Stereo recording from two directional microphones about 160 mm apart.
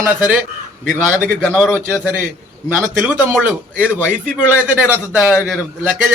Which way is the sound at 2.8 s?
10° right (ahead or behind).